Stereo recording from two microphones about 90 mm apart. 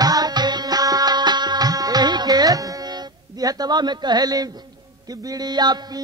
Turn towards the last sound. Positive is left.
turn(degrees=-50)  # may be behind; listen again after turning